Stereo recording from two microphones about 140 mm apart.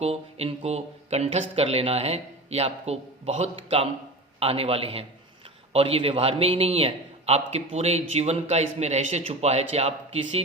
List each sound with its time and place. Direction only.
0.0 s a man's voice: 45° right (ahead or behind)